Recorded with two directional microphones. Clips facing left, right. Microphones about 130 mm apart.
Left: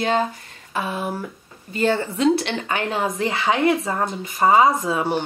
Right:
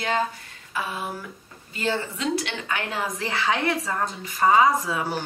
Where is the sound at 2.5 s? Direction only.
30° left (ahead or behind).